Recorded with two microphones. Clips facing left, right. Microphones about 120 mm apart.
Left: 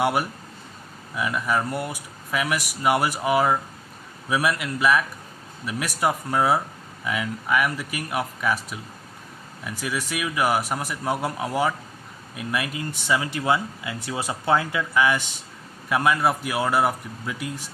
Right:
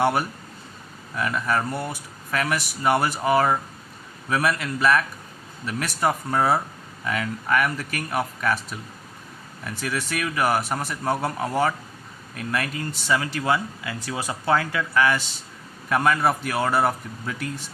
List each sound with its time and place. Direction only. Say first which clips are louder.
0.0 s speech: right 1 dB; 10° left (ahead or behind)